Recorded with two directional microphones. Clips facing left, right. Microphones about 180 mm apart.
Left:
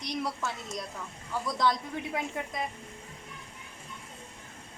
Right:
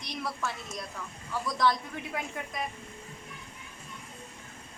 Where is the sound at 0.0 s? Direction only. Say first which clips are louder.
Left 2 dB; 20° left (ahead or behind).